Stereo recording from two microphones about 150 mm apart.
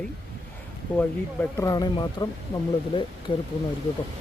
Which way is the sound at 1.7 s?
30° left (ahead or behind).